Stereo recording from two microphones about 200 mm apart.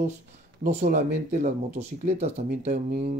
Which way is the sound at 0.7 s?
35° right (ahead or behind).